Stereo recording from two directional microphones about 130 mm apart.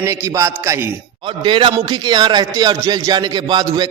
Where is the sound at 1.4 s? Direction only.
40° right (ahead or behind).